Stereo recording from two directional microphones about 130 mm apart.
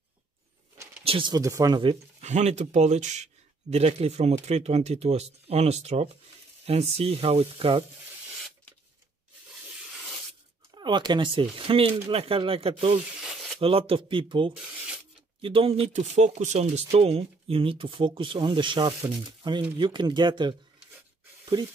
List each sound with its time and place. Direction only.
1.0 s a sound: 45° right (ahead or behind)
1.3 s speech: 25° right (ahead or behind)
1.8 s speech: 40° right (ahead or behind)
2.2 s speech: 60° right (ahead or behind)
3.7 s speech: 50° right (ahead or behind)
10.7 s speech: 35° right (ahead or behind)
13.2 s a sound: 5° right (ahead or behind)
13.6 s speech: 45° right (ahead or behind)
16.9 s speech: 50° right (ahead or behind)